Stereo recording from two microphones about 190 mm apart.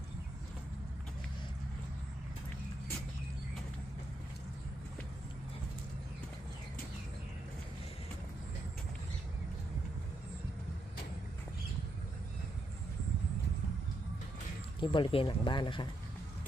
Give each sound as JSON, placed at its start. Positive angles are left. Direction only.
{"t": 14.8, "sound": "speech", "side_deg": 25}